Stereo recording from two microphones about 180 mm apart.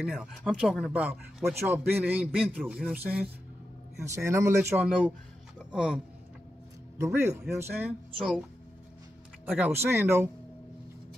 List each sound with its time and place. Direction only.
0.0 s speech: 5° right (ahead or behind)
7.0 s speech: 15° right (ahead or behind)
9.5 s speech: 10° right (ahead or behind)